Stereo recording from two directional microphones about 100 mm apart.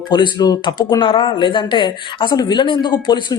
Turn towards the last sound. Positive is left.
turn(degrees=50)  # may be behind; listen again after turning